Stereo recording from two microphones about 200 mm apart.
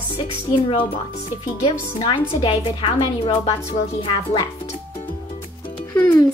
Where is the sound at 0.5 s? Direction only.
25° left (ahead or behind).